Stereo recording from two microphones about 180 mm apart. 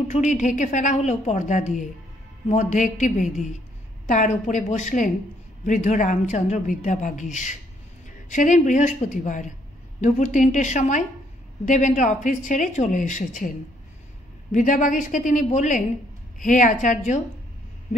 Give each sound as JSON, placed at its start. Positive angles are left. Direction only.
{"t": 0.1, "sound": "a woman's voice", "side_deg": 40}
{"t": 14.5, "sound": "speech", "side_deg": 45}